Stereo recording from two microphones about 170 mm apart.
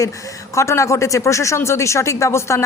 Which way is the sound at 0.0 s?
20° left (ahead or behind).